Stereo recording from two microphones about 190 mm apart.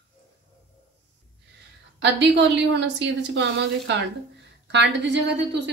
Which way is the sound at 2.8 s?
65° right (ahead or behind).